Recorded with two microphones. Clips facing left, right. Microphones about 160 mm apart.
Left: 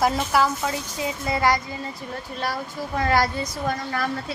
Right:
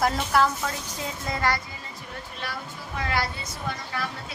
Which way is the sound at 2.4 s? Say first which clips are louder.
Left 8 dB; 40° left (ahead or behind).